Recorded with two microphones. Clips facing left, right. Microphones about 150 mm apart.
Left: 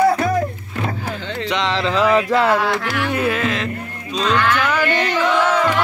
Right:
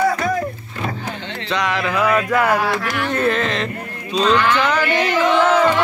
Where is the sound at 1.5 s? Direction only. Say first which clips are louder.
Even; 25° left (ahead or behind).